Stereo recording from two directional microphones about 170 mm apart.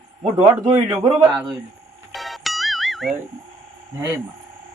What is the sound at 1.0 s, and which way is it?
Speech, 25° right (ahead or behind).